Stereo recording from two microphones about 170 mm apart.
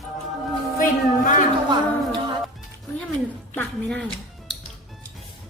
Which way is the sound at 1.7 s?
25° right (ahead or behind).